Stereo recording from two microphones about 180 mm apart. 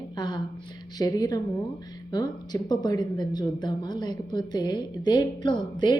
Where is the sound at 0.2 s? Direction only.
25° left (ahead or behind).